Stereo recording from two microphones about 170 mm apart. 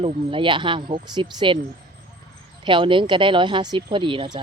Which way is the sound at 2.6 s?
30° right (ahead or behind).